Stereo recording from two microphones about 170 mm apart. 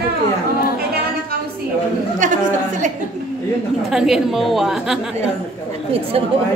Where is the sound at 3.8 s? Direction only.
5° right (ahead or behind).